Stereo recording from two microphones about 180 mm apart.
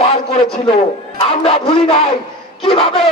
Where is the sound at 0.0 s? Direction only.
35° left (ahead or behind).